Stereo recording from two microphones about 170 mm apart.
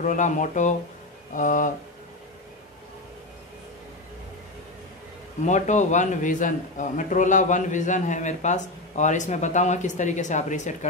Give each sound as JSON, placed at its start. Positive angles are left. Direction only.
{"t": 0.0, "sound": "a man's voice", "side_deg": 50}
{"t": 5.4, "sound": "a man's voice", "side_deg": 45}